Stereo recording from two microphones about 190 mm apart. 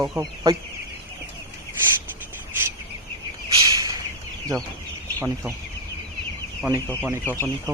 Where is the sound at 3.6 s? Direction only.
20° right (ahead or behind).